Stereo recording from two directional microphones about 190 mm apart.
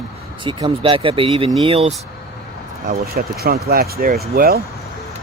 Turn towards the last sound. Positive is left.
turn(degrees=-50)  # may be behind; listen again after turning